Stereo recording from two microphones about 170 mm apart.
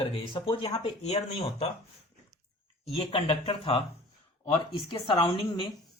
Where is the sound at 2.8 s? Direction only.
35° left (ahead or behind).